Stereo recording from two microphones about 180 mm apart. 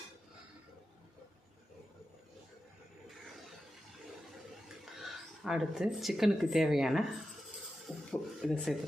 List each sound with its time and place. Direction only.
4.9 s speech: centre (ahead or behind)